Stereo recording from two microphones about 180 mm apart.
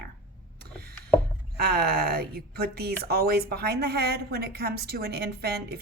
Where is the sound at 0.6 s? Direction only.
60° right (ahead or behind).